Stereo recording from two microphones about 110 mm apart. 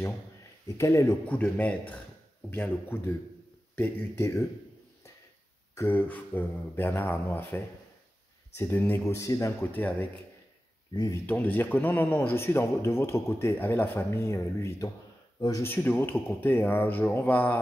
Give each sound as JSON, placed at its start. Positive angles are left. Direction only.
{"t": 0.7, "sound": "a man's voice", "side_deg": 25}
{"t": 1.2, "sound": "a man's voice", "side_deg": 15}
{"t": 5.8, "sound": "a man's voice", "side_deg": 15}
{"t": 9.7, "sound": "speech", "side_deg": 15}
{"t": 11.2, "sound": "a man's voice", "side_deg": 15}